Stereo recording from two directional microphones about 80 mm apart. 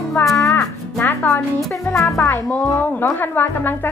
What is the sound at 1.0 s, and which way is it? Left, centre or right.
Speech, left.